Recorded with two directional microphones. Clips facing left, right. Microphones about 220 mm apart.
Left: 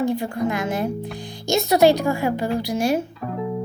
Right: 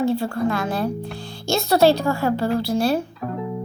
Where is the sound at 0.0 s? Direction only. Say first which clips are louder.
Right 1 dB; 15° left (ahead or behind).